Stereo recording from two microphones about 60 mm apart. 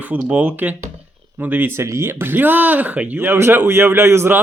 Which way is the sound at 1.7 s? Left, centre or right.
Right.